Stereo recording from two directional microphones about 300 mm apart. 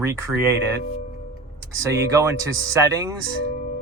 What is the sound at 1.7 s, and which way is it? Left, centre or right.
Speech, centre.